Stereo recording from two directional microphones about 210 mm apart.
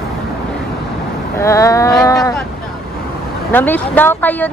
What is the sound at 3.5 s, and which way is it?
Speech, 10° left (ahead or behind).